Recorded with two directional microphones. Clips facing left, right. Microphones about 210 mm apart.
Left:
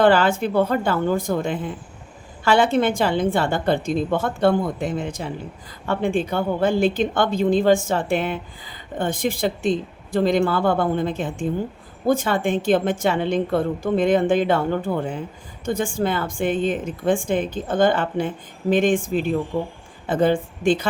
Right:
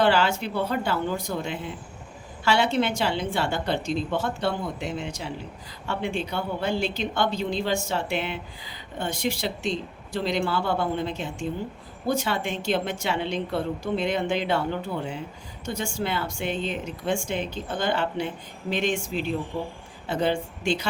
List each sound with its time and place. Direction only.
0.0 s a woman's voice: 50° left (ahead or behind)